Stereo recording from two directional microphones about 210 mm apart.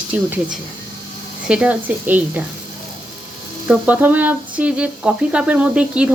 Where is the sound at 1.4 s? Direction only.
5° right (ahead or behind).